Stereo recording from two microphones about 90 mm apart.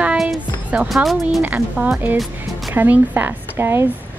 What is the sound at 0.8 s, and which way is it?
Speech, centre (ahead or behind).